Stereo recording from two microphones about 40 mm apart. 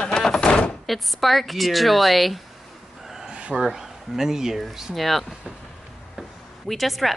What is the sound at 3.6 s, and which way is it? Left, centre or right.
Speech, centre.